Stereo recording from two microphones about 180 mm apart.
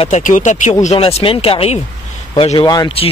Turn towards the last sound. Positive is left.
turn(degrees=25)  # may be behind; listen again after turning